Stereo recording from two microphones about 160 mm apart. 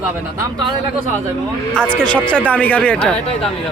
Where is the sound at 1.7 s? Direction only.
5° left (ahead or behind).